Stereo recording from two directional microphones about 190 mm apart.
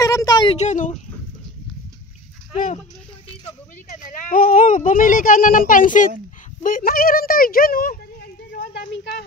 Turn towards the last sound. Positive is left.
turn(degrees=50)  # may be behind; listen again after turning